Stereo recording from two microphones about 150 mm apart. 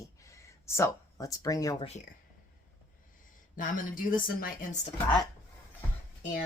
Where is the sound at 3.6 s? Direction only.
65° left (ahead or behind).